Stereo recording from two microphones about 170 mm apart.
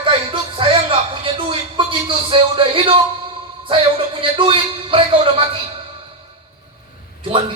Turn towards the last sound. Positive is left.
turn(degrees=-30)  # may be behind; listen again after turning